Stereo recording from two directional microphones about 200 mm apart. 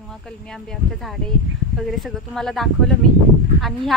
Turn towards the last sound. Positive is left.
turn(degrees=0)  # may be behind; listen again after turning